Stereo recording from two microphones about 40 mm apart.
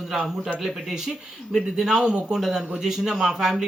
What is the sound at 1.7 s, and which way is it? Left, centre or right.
Speech, centre.